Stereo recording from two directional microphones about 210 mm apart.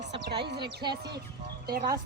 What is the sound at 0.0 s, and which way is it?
Music, 55° right (ahead or behind).